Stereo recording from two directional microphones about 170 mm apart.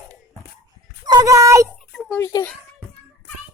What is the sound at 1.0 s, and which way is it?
Speech, 20° right (ahead or behind).